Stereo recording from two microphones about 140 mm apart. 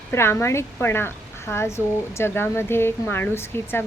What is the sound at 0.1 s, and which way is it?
A woman's voice, 20° left (ahead or behind).